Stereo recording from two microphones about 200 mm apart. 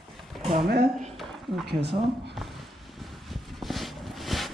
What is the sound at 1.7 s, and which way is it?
Speech, 55° right (ahead or behind).